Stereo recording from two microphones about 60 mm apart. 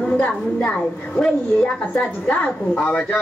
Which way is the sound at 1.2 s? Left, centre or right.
Centre.